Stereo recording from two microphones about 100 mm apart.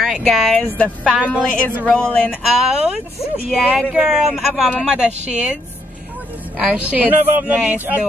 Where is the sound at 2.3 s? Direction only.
5° right (ahead or behind).